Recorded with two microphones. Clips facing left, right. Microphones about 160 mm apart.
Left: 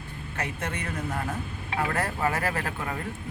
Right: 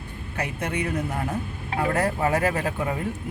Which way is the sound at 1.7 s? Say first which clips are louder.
Right 4 dB; 40° right (ahead or behind).